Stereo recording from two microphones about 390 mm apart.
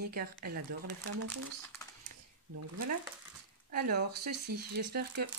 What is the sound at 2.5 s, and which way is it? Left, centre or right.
Speech, right.